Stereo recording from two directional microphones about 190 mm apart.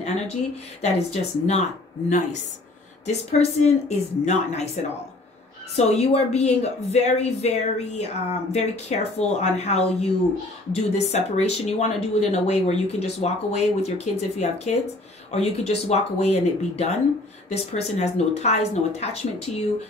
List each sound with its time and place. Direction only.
0.0 s a sound: 35° left (ahead or behind)
0.8 s a woman's voice: 35° left (ahead or behind)
5.8 s a woman's voice: 35° left (ahead or behind)